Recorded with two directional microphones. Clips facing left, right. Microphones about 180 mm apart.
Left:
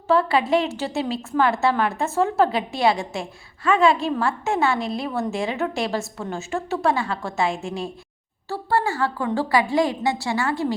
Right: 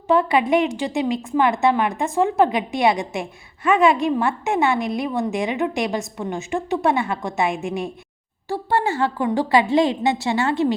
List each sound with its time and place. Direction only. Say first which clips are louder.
0.1 s a woman's voice: right 2 dB; 15° right (ahead or behind)